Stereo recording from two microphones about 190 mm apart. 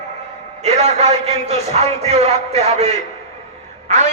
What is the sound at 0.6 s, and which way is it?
A man's voice, 35° right (ahead or behind).